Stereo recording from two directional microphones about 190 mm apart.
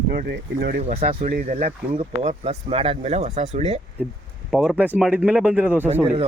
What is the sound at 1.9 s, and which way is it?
Speech, 35° right (ahead or behind).